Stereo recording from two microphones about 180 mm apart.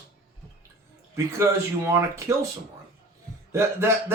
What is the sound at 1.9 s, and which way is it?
Speech, 15° right (ahead or behind).